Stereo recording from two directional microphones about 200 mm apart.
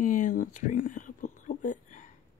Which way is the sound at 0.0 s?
40° left (ahead or behind).